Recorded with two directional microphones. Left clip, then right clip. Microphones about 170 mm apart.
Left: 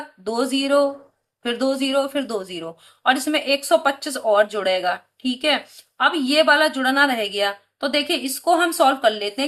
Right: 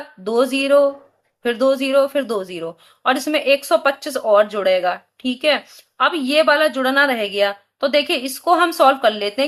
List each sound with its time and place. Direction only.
0.3 s speech: 30° right (ahead or behind)